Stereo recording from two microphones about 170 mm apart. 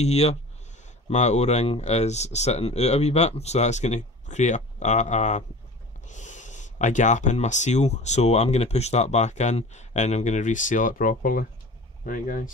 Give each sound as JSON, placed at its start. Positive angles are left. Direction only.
{"t": 0.0, "sound": "speech", "side_deg": 40}